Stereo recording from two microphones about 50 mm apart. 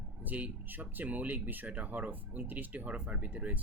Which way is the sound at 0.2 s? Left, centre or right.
Right.